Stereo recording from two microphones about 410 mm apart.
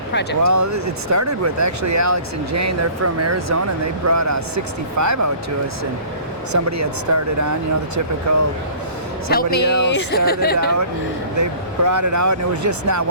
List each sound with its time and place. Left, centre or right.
0.1 s speech: left
0.4 s speech: right
6.5 s speech: right
9.3 s speech: left
11.3 s speech: right